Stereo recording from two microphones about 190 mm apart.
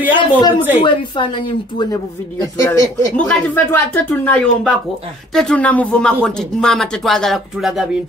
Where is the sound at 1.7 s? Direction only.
20° left (ahead or behind).